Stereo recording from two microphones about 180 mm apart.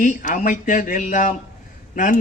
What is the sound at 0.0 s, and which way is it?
Mantra, 45° left (ahead or behind).